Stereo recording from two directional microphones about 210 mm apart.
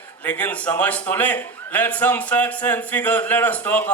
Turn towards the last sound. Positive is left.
turn(degrees=5)  # may be behind; listen again after turning